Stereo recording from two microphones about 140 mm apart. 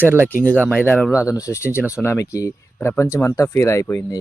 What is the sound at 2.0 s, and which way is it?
Speech, 20° left (ahead or behind).